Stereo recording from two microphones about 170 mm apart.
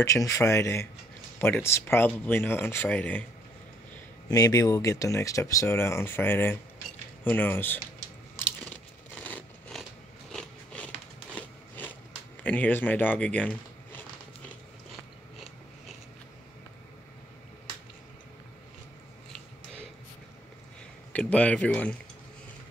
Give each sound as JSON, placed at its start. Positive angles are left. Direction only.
{"t": 0.0, "sound": "speech", "side_deg": 20}
{"t": 4.3, "sound": "speech", "side_deg": 20}
{"t": 9.1, "sound": "a sound", "side_deg": 10}
{"t": 10.3, "sound": "biting", "side_deg": 5}
{"t": 11.3, "sound": "a sound", "side_deg": 10}
{"t": 12.4, "sound": "speech", "side_deg": 10}
{"t": 21.1, "sound": "speech", "side_deg": 5}